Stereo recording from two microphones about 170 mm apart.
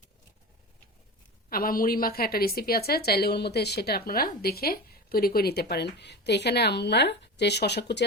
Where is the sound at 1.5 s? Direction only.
60° left (ahead or behind).